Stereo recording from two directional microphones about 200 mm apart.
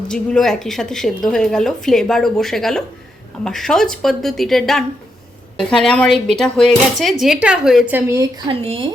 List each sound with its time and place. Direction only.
0.1 s a woman's voice: 5° left (ahead or behind); by 8.3 s 15° right (ahead or behind)
8.4 s speech: 25° right (ahead or behind)